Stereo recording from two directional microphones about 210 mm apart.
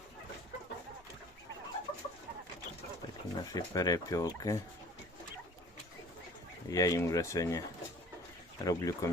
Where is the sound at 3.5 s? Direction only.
15° left (ahead or behind).